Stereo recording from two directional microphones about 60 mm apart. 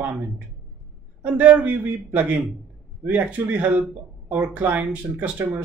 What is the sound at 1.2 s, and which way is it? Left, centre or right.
Speech, right.